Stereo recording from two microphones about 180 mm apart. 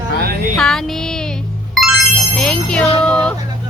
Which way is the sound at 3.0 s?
5° left (ahead or behind).